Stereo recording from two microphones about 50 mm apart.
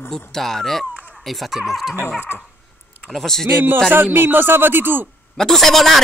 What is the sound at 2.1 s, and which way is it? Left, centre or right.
Dog, left.